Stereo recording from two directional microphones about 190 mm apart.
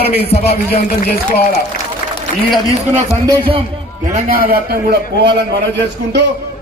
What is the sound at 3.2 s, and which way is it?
Speech, 25° right (ahead or behind).